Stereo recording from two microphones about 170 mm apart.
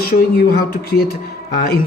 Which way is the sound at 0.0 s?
60° left (ahead or behind).